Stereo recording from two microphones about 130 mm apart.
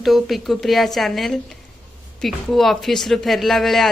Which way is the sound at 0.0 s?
Centre (ahead or behind).